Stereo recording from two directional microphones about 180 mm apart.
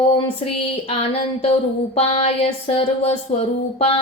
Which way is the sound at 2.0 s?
35° left (ahead or behind).